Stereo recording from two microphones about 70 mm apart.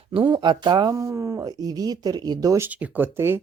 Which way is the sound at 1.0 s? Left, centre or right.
Right.